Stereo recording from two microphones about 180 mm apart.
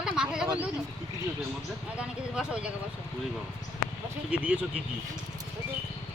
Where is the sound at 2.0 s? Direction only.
5° right (ahead or behind).